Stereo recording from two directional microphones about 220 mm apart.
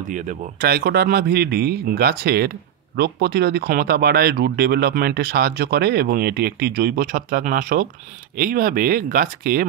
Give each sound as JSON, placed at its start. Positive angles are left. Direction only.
{"t": 0.1, "sound": "speech", "side_deg": -40}